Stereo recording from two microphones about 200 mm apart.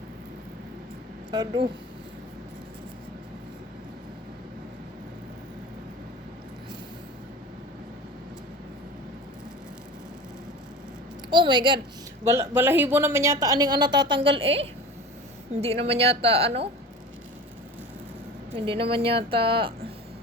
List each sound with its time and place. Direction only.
1.3 s a woman's voice: 20° right (ahead or behind)
11.3 s a woman's voice: 25° right (ahead or behind)
18.5 s a woman's voice: 25° right (ahead or behind)